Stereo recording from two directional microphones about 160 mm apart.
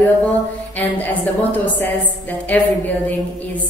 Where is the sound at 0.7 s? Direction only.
10° left (ahead or behind).